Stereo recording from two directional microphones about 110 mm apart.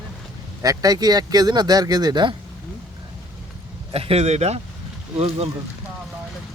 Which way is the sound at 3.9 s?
65° right (ahead or behind).